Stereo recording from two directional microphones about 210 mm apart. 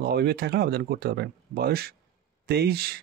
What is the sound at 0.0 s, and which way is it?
Speech, 50° right (ahead or behind).